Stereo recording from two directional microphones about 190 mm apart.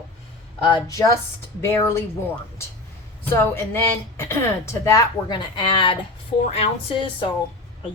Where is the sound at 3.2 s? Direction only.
10° left (ahead or behind).